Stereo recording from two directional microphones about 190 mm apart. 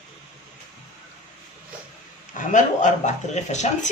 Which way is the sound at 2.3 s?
40° left (ahead or behind).